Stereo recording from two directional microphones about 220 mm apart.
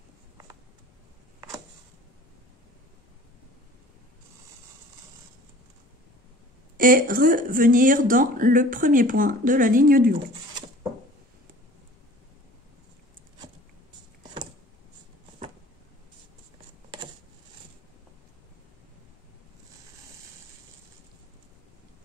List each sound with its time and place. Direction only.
6.8 s speech: 40° right (ahead or behind)